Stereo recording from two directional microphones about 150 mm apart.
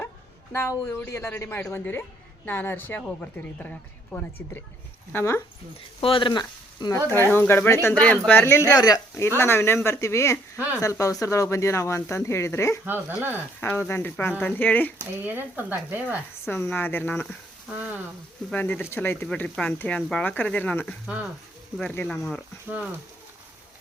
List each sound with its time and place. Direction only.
0.5 s a woman's voice: 20° left (ahead or behind)
6.0 s speech: 35° left (ahead or behind)
7.3 s a woman's voice: 15° left (ahead or behind)
12.8 s speech: 15° right (ahead or behind)
13.6 s a woman's voice: 15° left (ahead or behind)
15.2 s speech: 15° right (ahead or behind)
16.5 s a woman's voice: 15° left (ahead or behind)
18.5 s a woman's voice: 10° left (ahead or behind)